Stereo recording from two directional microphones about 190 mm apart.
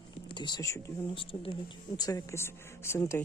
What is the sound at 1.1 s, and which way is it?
Speech, 25° left (ahead or behind).